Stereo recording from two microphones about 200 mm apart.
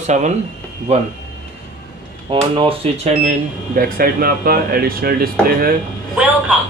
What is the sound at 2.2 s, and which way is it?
Speech, 25° right (ahead or behind).